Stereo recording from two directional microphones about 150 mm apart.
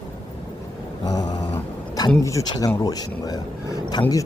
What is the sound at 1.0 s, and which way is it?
Speech, 25° left (ahead or behind).